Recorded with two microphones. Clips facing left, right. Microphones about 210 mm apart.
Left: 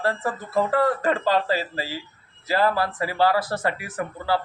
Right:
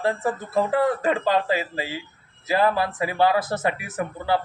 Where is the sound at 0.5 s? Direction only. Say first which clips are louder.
Even; 20° right (ahead or behind).